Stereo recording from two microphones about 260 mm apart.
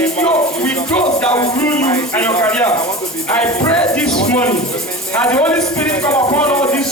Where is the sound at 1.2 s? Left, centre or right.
Centre.